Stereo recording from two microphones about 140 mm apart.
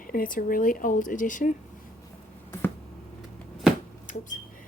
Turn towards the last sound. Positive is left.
turn(degrees=65)  # may be behind; listen again after turning